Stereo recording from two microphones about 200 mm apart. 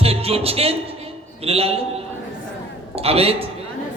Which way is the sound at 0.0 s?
30° right (ahead or behind).